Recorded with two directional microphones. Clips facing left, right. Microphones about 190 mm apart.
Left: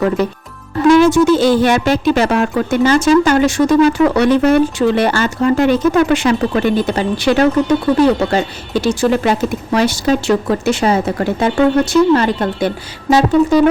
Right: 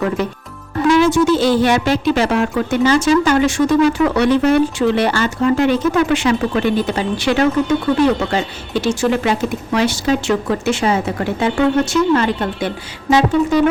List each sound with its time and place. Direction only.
0.9 s speech: 45° left (ahead or behind)